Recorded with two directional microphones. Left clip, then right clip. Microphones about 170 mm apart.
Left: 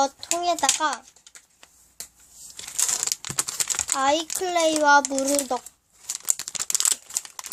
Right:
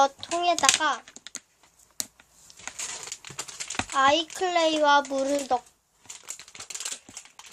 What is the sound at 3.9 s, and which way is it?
A child's voice, 30° left (ahead or behind).